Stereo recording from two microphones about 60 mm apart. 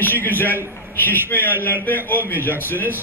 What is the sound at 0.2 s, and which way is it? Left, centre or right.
A man's voice, left.